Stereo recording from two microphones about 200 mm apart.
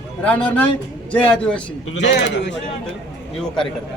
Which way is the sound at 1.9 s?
60° left (ahead or behind).